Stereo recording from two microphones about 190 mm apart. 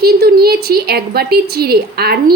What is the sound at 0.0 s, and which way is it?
A woman's voice, 55° right (ahead or behind).